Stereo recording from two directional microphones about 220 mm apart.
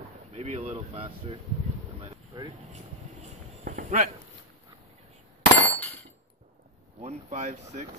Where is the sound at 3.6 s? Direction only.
35° right (ahead or behind).